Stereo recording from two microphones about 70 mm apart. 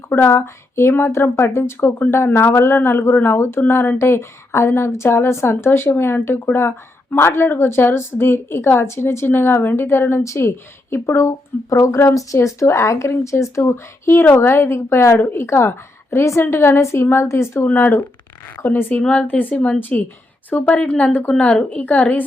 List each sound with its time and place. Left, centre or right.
0.2 s speech: left
17.7 s a woman's voice: left
20.7 s a woman's voice: centre